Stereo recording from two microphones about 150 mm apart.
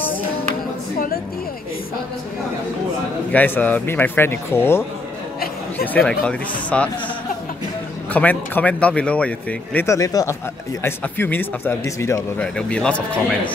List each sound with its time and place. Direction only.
0.9 s music: 75° left (ahead or behind)
3.3 s speech: 10° left (ahead or behind)
5.9 s speech: 5° left (ahead or behind)
8.1 s speech: 10° left (ahead or behind)
9.8 s speech: 25° left (ahead or behind); by 12.9 s 5° left (ahead or behind)